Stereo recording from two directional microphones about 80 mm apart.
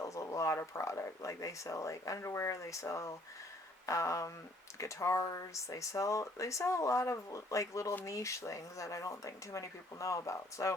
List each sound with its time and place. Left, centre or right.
0.0 s speech: left